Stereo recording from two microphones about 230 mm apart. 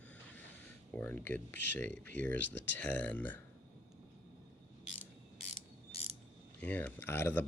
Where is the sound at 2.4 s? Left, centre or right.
Left.